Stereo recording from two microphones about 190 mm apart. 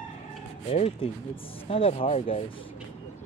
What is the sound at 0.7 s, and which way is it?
Speech, 35° left (ahead or behind).